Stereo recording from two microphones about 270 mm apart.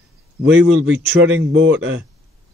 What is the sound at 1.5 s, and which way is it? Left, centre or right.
Speech, right.